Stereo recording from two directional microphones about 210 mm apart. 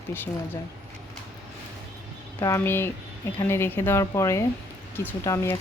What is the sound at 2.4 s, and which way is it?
A woman's voice, 15° left (ahead or behind).